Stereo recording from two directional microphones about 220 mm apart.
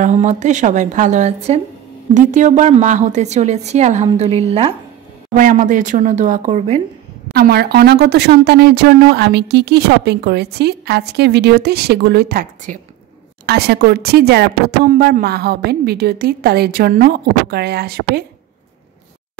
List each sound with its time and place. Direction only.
0.0 s a woman's voice: 30° right (ahead or behind)
5.3 s a woman's voice: 35° right (ahead or behind)
7.3 s speech: 45° right (ahead or behind)